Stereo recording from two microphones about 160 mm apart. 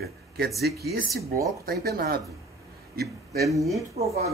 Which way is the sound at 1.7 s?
70° right (ahead or behind).